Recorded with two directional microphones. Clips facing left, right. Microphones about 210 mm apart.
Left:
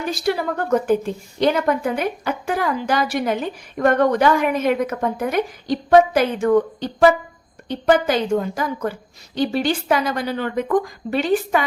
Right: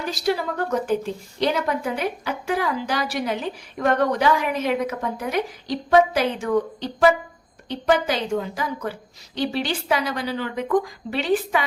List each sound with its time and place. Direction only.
0.0 s a woman's voice: 55° left (ahead or behind)